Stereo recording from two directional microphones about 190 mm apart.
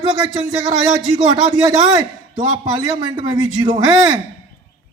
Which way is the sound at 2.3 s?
20° right (ahead or behind).